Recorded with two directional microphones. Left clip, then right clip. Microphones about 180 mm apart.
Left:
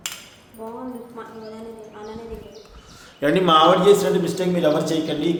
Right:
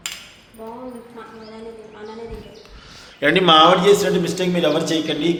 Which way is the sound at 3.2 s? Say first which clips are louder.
Right 3 dB; 20° right (ahead or behind).